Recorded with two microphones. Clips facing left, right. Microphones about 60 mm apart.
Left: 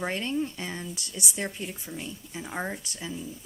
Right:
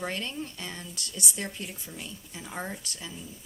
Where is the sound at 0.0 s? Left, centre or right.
Left.